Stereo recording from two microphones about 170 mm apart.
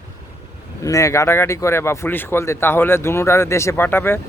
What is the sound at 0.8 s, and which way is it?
Speech, 20° left (ahead or behind).